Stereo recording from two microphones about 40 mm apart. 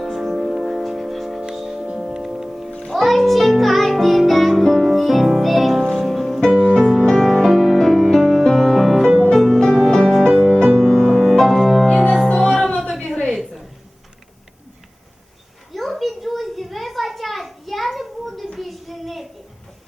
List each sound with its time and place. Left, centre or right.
0.0 s music: centre
1.8 s music: centre
2.9 s music: centre
6.7 s music: centre
8.4 s music: centre
11.2 s music: centre
13.2 s a sound: centre
15.7 s a sound: centre